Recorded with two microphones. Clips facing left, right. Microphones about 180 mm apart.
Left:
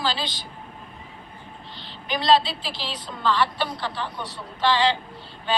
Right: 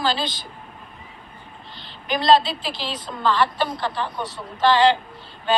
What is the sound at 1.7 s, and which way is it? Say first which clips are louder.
A woman's voice: right 3 dB; 50° right (ahead or behind).